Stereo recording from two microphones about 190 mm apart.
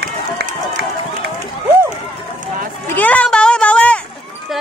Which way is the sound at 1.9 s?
40° right (ahead or behind).